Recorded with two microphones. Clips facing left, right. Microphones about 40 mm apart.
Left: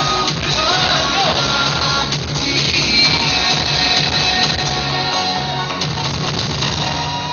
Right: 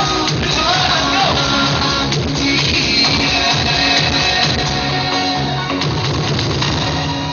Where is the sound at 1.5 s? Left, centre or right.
Centre.